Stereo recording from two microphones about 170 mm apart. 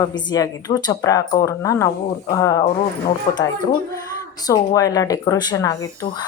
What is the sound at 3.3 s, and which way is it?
Speech, 30° left (ahead or behind).